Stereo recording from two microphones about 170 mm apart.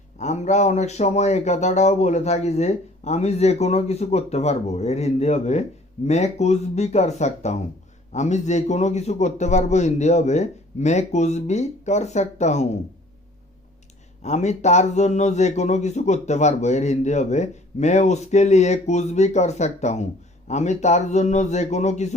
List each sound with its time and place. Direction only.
0.2 s speech: 45° left (ahead or behind)
14.2 s speech: 40° left (ahead or behind)